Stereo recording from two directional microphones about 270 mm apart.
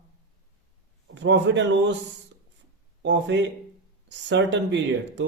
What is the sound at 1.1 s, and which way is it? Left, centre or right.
Speech, right.